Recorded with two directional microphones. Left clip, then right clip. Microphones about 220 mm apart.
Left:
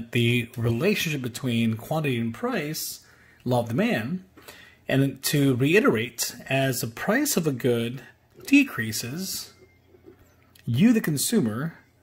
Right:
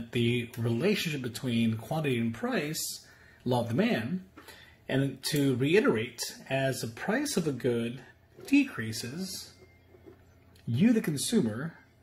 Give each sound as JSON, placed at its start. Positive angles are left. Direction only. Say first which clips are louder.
{"t": 0.1, "sound": "speech", "louder": "left 6 dB", "side_deg": 40}
{"t": 4.5, "sound": "speech", "louder": "left 7 dB", "side_deg": 40}
{"t": 10.7, "sound": "speech", "louder": "left 5 dB", "side_deg": 35}